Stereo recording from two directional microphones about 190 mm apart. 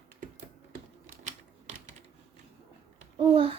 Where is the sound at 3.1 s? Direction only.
30° right (ahead or behind).